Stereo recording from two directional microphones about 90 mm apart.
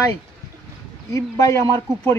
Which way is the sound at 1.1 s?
35° left (ahead or behind).